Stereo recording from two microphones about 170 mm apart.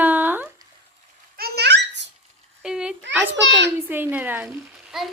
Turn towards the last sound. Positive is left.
turn(degrees=0)  # may be behind; listen again after turning